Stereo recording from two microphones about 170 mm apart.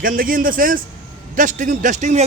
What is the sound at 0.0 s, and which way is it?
A man's voice, 55° right (ahead or behind).